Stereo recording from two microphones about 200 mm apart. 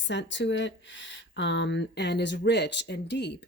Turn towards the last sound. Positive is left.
turn(degrees=60)  # may be behind; listen again after turning